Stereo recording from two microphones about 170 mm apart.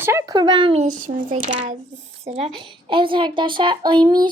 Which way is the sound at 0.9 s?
50° right (ahead or behind).